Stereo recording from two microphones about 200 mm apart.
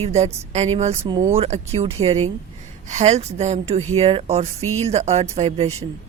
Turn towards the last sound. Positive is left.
turn(degrees=-30)  # may be behind; listen again after turning